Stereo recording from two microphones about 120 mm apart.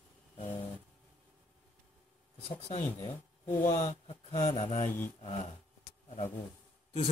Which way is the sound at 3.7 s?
70° left (ahead or behind).